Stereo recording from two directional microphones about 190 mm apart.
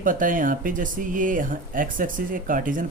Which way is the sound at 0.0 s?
45° right (ahead or behind).